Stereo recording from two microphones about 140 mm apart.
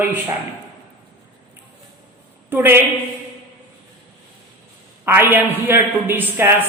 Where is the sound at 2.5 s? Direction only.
15° right (ahead or behind).